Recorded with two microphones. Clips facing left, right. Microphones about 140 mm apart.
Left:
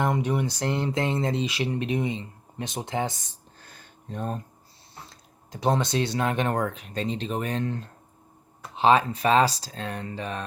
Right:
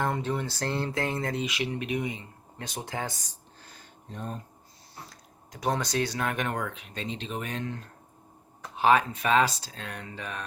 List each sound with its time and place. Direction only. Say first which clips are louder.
0.0 s speech: left 4 dB; 15° left (ahead or behind)
4.1 s speech: left 6 dB; 55° left (ahead or behind)
5.0 s speech: even; 25° left (ahead or behind)
6.5 s speech: left 6 dB; 40° left (ahead or behind)